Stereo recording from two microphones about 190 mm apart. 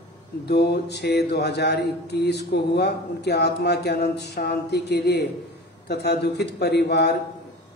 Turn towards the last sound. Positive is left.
turn(degrees=60)  # may be behind; listen again after turning